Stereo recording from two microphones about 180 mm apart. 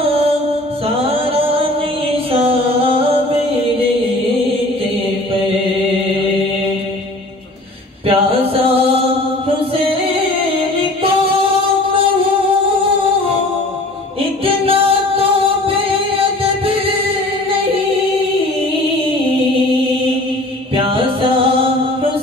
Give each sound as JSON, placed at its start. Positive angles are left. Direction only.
{"t": 0.8, "sound": "music", "side_deg": -30}
{"t": 8.1, "sound": "a sound", "side_deg": -30}
{"t": 9.8, "sound": "music", "side_deg": -30}
{"t": 14.4, "sound": "music", "side_deg": -30}
{"t": 20.7, "sound": "music", "side_deg": -30}